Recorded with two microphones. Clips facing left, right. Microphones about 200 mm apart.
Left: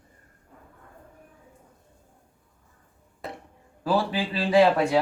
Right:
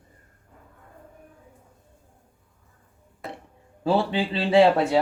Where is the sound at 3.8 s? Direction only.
25° right (ahead or behind).